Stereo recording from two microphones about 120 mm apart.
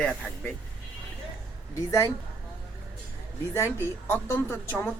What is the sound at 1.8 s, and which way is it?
Speech, 25° left (ahead or behind).